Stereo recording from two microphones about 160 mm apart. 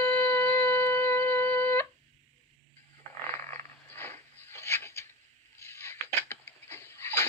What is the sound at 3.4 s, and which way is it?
Frog, 15° left (ahead or behind).